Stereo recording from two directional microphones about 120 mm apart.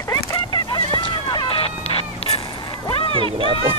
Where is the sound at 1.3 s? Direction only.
50° left (ahead or behind).